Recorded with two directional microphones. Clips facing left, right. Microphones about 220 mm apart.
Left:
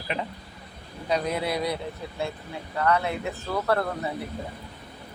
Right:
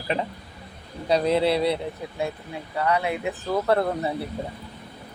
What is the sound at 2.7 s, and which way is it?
Speech, 15° right (ahead or behind).